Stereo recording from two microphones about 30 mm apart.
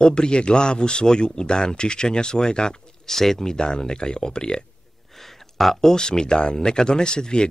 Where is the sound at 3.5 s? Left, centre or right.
Left.